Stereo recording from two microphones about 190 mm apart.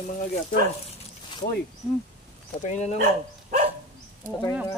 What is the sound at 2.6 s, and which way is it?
Speech, 40° left (ahead or behind).